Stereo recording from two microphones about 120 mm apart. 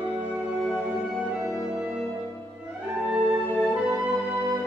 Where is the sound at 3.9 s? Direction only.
20° right (ahead or behind).